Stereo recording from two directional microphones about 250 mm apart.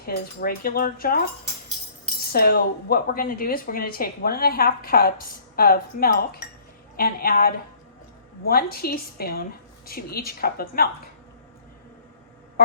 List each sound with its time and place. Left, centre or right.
0.0 s speech: left
2.3 s speech: left
12.6 s a sound: left